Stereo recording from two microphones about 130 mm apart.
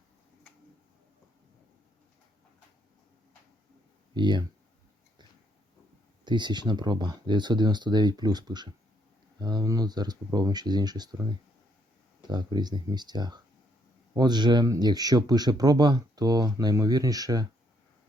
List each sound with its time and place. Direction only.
4.1 s speech: 35° right (ahead or behind)
6.2 s speech: 35° right (ahead or behind)
12.3 s speech: 35° right (ahead or behind)